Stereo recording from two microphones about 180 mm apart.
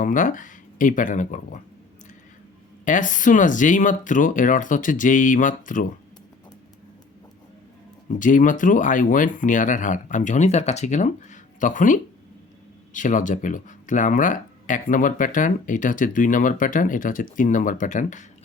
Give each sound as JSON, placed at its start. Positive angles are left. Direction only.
{"t": 0.0, "sound": "speech", "side_deg": 45}
{"t": 2.8, "sound": "speech", "side_deg": 45}
{"t": 8.2, "sound": "speech", "side_deg": 45}